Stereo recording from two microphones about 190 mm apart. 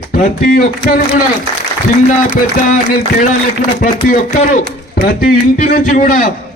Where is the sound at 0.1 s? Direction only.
50° left (ahead or behind).